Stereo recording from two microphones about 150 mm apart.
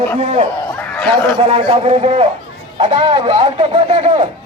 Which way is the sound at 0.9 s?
5° left (ahead or behind).